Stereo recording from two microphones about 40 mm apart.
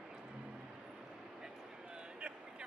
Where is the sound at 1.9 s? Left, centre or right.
Right.